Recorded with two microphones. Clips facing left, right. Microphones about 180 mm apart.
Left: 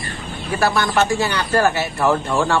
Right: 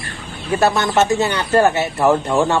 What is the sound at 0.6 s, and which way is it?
Speech, 25° right (ahead or behind).